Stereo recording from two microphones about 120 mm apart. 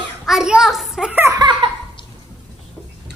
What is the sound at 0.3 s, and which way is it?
Speech, 5° right (ahead or behind).